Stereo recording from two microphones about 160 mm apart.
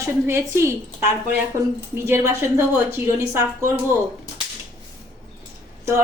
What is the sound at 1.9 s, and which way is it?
Speech, 15° right (ahead or behind).